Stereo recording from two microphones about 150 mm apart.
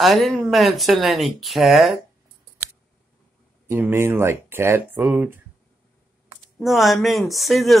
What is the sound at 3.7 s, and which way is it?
Speech, 15° right (ahead or behind).